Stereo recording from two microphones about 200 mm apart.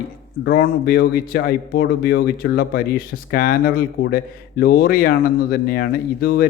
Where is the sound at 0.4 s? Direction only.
50° left (ahead or behind).